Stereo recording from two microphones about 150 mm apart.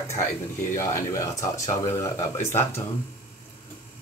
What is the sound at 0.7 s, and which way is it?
Speech, 20° left (ahead or behind).